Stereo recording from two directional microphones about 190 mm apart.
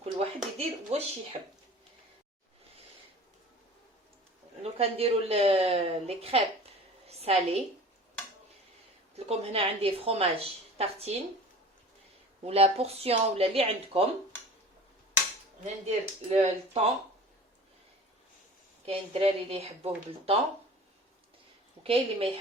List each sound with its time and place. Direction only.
0.0 s a sound: 30° right (ahead or behind)
4.6 s speech: 30° right (ahead or behind)
9.1 s speech: 30° right (ahead or behind)
12.5 s speech: 35° right (ahead or behind)
15.6 s speech: 35° right (ahead or behind)
18.9 s speech: 30° right (ahead or behind)
21.8 s a woman's voice: 30° right (ahead or behind)